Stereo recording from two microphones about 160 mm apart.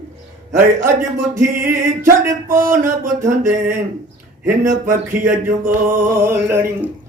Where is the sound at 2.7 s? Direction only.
20° right (ahead or behind).